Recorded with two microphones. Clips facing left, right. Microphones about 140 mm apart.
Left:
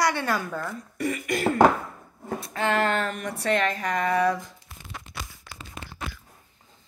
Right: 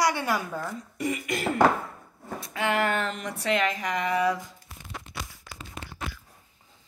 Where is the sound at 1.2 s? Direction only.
45° left (ahead or behind).